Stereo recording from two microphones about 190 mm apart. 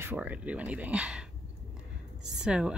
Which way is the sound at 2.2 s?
5° right (ahead or behind).